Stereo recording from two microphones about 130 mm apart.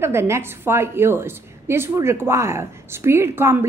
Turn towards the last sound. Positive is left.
turn(degrees=-20)  # may be behind; listen again after turning